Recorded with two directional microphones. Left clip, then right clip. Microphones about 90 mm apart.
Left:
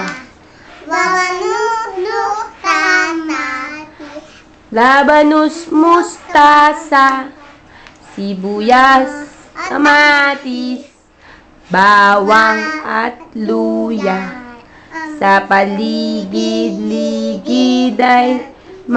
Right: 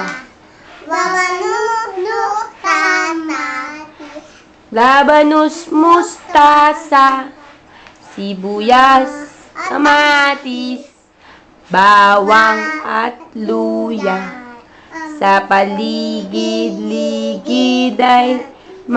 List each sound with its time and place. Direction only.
0.8 s child singing: 15° right (ahead or behind)
4.7 s a sound: 5° right (ahead or behind)
8.2 s a child's voice: 5° right (ahead or behind)
11.7 s a sound: 5° right (ahead or behind)
13.9 s a child's voice: 5° left (ahead or behind)
15.1 s female singing: 5° right (ahead or behind)
17.5 s music: centre (ahead or behind)